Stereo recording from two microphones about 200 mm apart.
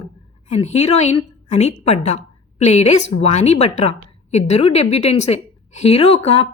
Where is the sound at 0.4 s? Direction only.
35° left (ahead or behind).